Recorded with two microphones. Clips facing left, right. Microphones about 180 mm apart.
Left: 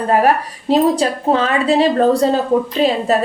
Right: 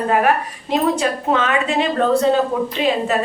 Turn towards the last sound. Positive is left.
turn(degrees=35)  # may be behind; listen again after turning